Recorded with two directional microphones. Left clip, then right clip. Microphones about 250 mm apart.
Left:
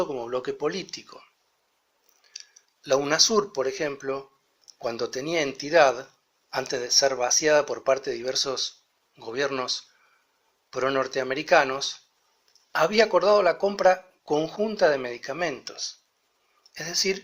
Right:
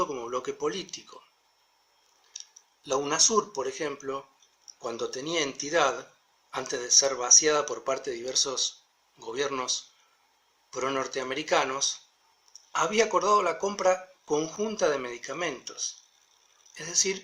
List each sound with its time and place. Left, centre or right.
0.1 s speech: centre
2.3 s speech: centre
10.8 s speech: centre